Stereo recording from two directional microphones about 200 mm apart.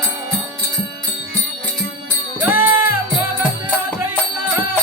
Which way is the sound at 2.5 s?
10° right (ahead or behind).